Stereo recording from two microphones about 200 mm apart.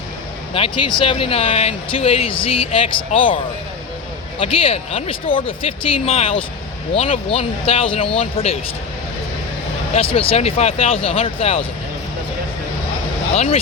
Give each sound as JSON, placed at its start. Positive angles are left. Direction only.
{"t": 0.5, "sound": "speech", "side_deg": 25}
{"t": 9.9, "sound": "speech", "side_deg": 30}
{"t": 13.3, "sound": "speech", "side_deg": 30}